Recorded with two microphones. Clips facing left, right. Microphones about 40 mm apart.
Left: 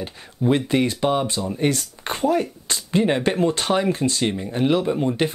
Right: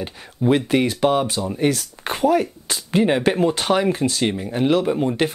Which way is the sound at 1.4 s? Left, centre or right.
Centre.